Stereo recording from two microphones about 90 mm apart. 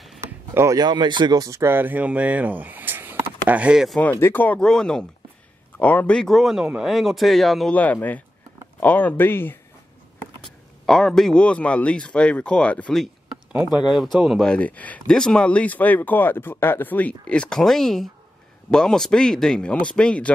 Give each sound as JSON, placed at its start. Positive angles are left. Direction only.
{"t": 0.7, "sound": "speech", "side_deg": -55}
{"t": 4.1, "sound": "speech", "side_deg": 25}
{"t": 4.6, "sound": "speech", "side_deg": 5}
{"t": 7.7, "sound": "speech", "side_deg": 15}
{"t": 10.9, "sound": "speech", "side_deg": 5}
{"t": 13.7, "sound": "speech", "side_deg": -5}
{"t": 14.5, "sound": "speech", "side_deg": 15}